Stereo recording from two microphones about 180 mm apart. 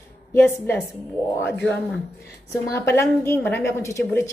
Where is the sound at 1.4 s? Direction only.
5° left (ahead or behind).